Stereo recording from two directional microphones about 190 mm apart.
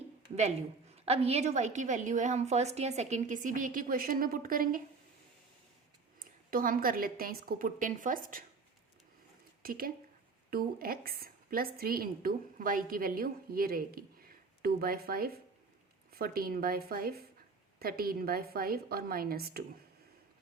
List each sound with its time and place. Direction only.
0.3 s a woman's voice: 35° right (ahead or behind)
6.5 s a woman's voice: 50° right (ahead or behind)
9.6 s a woman's voice: 50° right (ahead or behind)